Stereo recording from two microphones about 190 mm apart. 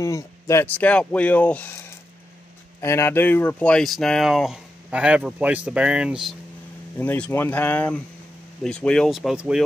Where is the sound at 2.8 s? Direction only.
15° left (ahead or behind); by 6.3 s 5° right (ahead or behind).